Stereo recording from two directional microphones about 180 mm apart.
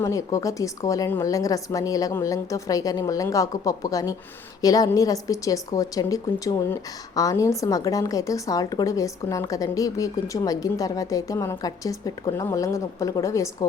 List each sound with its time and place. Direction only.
0.0 s a woman's voice: 20° left (ahead or behind)